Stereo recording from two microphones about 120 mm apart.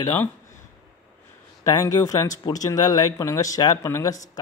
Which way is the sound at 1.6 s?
30° left (ahead or behind).